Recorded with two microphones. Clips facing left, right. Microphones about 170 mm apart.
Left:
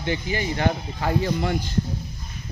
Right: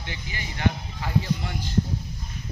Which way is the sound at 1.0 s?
65° left (ahead or behind).